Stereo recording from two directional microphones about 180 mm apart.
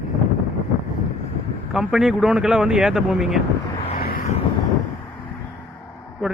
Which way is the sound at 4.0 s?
55° left (ahead or behind).